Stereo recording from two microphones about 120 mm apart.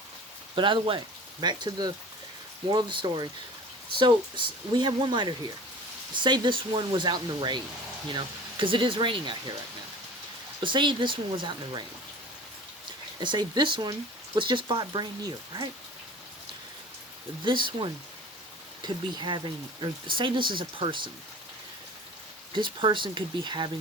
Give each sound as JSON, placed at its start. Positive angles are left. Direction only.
{"t": 0.5, "sound": "speech", "side_deg": -45}
{"t": 10.6, "sound": "speech", "side_deg": -40}
{"t": 13.1, "sound": "speech", "side_deg": -35}
{"t": 17.4, "sound": "speech", "side_deg": -45}
{"t": 22.5, "sound": "speech", "side_deg": -45}